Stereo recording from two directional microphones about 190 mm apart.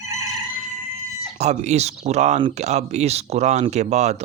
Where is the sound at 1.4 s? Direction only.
35° right (ahead or behind).